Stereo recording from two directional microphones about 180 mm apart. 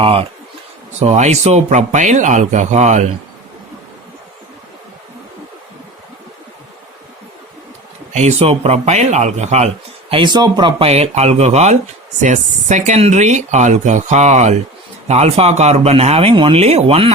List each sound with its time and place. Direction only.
0.0 s a man's voice: 30° right (ahead or behind)
8.1 s a man's voice: 40° right (ahead or behind)